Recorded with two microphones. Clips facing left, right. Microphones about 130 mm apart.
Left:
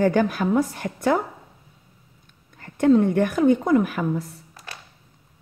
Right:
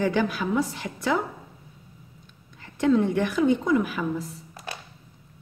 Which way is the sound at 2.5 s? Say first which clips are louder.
Left 4 dB; 50° left (ahead or behind).